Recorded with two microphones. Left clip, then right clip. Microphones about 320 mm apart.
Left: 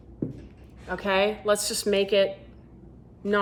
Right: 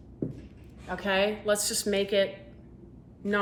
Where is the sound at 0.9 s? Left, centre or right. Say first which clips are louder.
Left 3 dB; centre.